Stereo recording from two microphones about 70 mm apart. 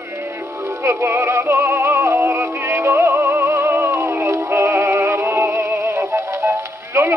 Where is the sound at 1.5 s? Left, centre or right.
Right.